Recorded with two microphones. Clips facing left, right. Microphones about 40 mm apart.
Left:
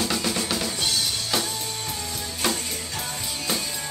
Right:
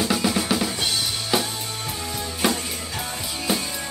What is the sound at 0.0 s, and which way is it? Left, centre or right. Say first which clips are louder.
Drum kit: right 4 dB; centre.